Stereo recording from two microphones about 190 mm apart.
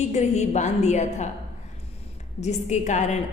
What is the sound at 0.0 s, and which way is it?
A woman's voice, 35° left (ahead or behind).